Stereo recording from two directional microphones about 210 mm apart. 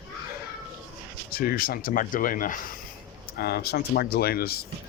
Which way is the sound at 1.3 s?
45° left (ahead or behind).